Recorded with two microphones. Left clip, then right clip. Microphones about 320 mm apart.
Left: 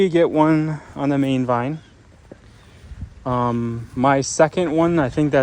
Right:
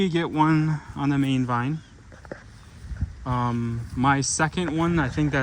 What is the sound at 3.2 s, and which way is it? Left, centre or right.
Speech, left.